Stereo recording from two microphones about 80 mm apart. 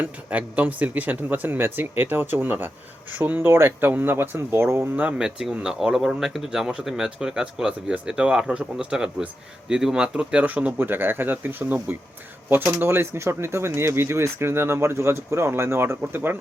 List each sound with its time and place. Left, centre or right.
0.0 s speech: centre
5.1 s speech: centre; by 16.4 s right